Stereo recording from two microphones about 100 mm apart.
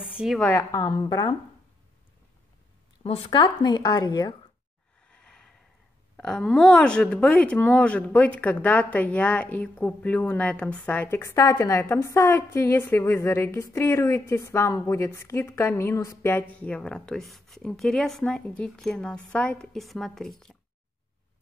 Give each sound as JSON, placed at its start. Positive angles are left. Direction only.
{"t": 0.1, "sound": "a sound", "side_deg": -10}
{"t": 0.5, "sound": "a woman's voice", "side_deg": 30}
{"t": 0.8, "sound": "speech", "side_deg": 40}
{"t": 3.0, "sound": "speech", "side_deg": 80}
{"t": 3.3, "sound": "speech", "side_deg": 45}
{"t": 5.1, "sound": "a sound", "side_deg": 10}
{"t": 6.2, "sound": "speech", "side_deg": 5}